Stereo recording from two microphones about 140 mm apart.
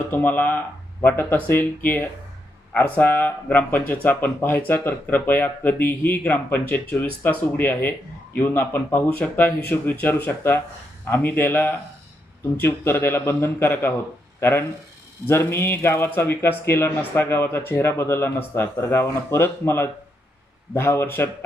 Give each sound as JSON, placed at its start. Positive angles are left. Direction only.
{"t": 0.1, "sound": "speech", "side_deg": 15}
{"t": 15.3, "sound": "speech", "side_deg": 15}